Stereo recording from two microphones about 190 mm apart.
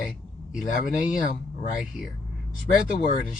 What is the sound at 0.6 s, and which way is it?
Speech, 45° left (ahead or behind).